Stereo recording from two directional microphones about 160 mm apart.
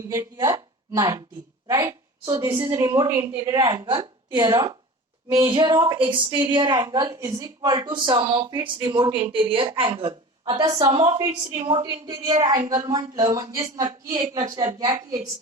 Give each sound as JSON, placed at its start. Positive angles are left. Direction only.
{"t": 0.1, "sound": "a woman's voice", "side_deg": -20}